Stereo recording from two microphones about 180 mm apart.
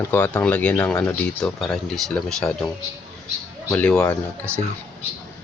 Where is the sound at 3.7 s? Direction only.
5° left (ahead or behind).